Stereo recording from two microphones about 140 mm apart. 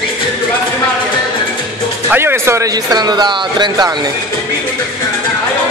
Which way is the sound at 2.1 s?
15° right (ahead or behind).